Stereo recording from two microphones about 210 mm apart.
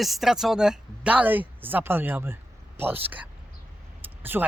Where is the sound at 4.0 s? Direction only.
10° right (ahead or behind).